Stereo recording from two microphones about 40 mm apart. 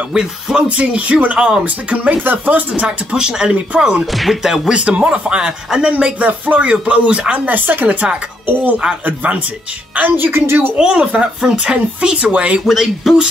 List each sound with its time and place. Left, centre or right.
0.1 s speech: centre; by 2.1 s right
2.2 s speech: right
2.7 s speech: right
3.2 s speech: right
4.0 s speech: centre
4.4 s speech: centre
4.8 s speech: right
7.4 s a woman's voice: right
9.9 s a woman's voice: right
10.8 s speech: right
12.6 s speech: centre